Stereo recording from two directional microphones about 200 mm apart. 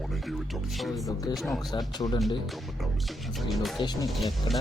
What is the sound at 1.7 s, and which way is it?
Speech, 20° left (ahead or behind).